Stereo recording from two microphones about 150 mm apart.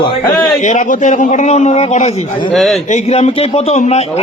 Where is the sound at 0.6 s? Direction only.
55° left (ahead or behind).